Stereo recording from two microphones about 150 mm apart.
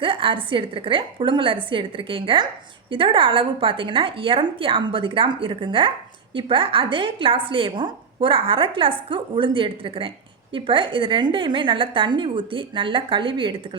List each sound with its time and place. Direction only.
0.0 s a woman's voice: 35° right (ahead or behind)